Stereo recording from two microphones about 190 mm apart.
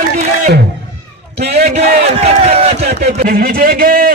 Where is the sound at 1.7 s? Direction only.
35° right (ahead or behind).